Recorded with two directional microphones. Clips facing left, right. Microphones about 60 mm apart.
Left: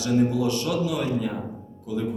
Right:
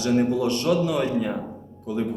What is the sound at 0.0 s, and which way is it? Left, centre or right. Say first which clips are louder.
Speech: right 1 dB; right.